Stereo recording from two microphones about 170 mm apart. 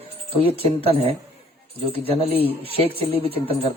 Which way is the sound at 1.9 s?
35° right (ahead or behind).